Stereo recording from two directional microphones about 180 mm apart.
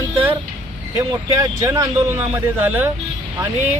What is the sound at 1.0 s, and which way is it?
Speech, 15° right (ahead or behind).